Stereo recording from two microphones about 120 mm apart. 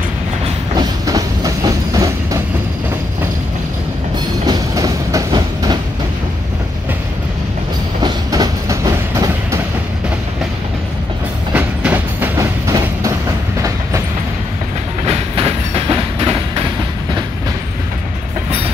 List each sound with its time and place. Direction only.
0.7 s train: 30° right (ahead or behind)
4.5 s train: 30° right (ahead or behind)
8.0 s train: 30° right (ahead or behind)
11.5 s train: 15° right (ahead or behind)
12.4 s train: 25° right (ahead or behind)
15.0 s train: 50° right (ahead or behind)